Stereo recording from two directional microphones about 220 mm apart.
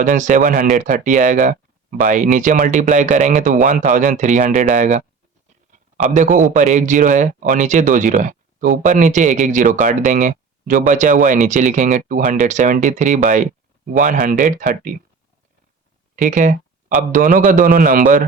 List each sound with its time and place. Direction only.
0.1 s speech: 35° right (ahead or behind)
6.1 s speech: 35° right (ahead or behind)
16.1 s speech: 35° right (ahead or behind)